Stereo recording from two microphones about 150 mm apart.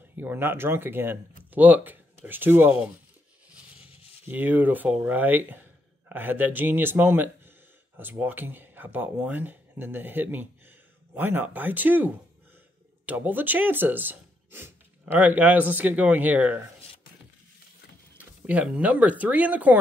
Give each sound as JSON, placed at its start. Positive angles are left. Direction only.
{"t": 0.2, "sound": "speech", "side_deg": -15}
{"t": 3.8, "sound": "a sound", "side_deg": 40}
{"t": 4.3, "sound": "speech", "side_deg": -10}
{"t": 18.1, "sound": "speech", "side_deg": -10}